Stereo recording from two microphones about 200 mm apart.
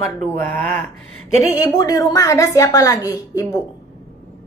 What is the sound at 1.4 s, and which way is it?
A woman's voice, 20° left (ahead or behind).